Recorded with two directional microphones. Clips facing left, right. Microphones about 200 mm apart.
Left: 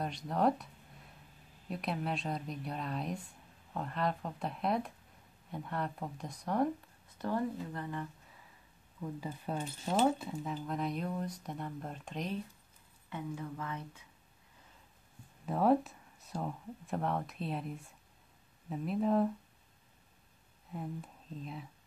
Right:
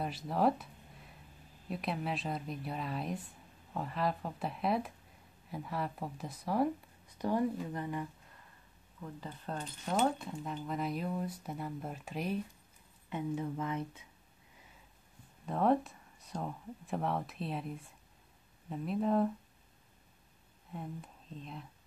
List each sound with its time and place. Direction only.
0.0 s speech: 5° right (ahead or behind)
1.7 s speech: centre (ahead or behind)
9.0 s speech: 10° left (ahead or behind); by 12.4 s 5° right (ahead or behind)
13.1 s speech: 20° right (ahead or behind)
15.4 s speech: 5° left (ahead or behind)
20.7 s speech: centre (ahead or behind)